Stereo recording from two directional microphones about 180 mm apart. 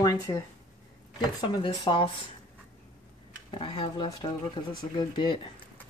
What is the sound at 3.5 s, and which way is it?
Speech, 30° left (ahead or behind).